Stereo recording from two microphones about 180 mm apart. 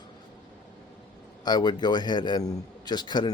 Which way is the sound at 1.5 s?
25° left (ahead or behind).